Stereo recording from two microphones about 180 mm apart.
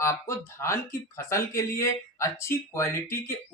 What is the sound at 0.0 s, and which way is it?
Speech, 15° left (ahead or behind).